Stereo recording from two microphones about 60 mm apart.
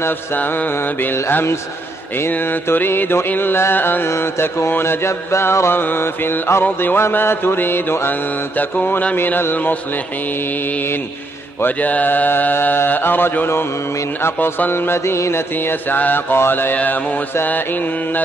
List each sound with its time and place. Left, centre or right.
0.0 s mantra: left
1.3 s mantra: left
4.1 s mantra: left
14.7 s mantra: left
15.5 s mantra: left